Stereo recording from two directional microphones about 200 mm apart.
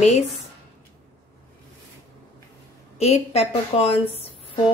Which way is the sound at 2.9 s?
30° left (ahead or behind).